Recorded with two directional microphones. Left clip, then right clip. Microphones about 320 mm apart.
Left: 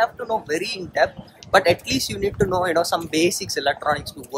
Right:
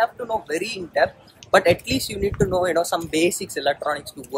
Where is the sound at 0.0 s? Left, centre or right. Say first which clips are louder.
Left 1 dB; centre.